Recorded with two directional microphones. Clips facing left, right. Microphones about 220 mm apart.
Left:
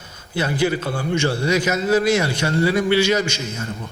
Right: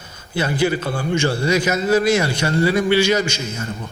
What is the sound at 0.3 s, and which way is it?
A man's voice, 15° right (ahead or behind).